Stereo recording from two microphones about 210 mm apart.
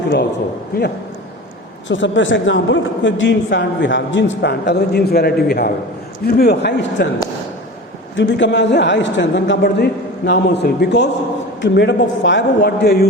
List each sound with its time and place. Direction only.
1.9 s a woman's voice: 60° left (ahead or behind)
8.1 s a woman's voice: 60° left (ahead or behind)